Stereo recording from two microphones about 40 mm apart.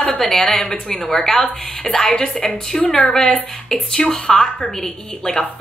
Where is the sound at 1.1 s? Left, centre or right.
Centre.